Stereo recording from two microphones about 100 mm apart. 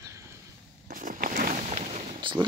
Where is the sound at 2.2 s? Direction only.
55° right (ahead or behind).